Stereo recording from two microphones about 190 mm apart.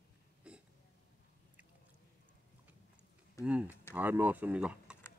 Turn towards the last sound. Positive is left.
turn(degrees=-5)  # may be behind; listen again after turning